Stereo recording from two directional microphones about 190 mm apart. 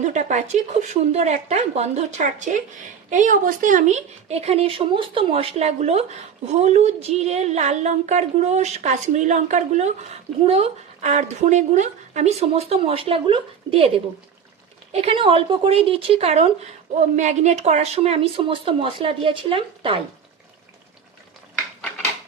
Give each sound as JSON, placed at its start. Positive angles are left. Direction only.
{"t": 0.0, "sound": "a woman's voice", "side_deg": -40}
{"t": 14.9, "sound": "speech", "side_deg": -30}